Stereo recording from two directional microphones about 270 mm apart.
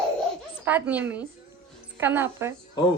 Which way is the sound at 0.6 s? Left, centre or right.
Centre.